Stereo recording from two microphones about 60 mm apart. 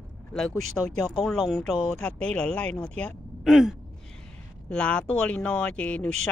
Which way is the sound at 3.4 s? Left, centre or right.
Centre.